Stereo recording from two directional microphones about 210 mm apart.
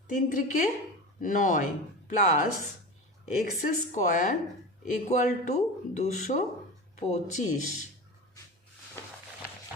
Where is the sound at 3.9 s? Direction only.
35° left (ahead or behind).